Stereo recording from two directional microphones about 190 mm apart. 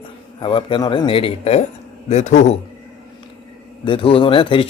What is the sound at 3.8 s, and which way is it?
Speech, 30° left (ahead or behind).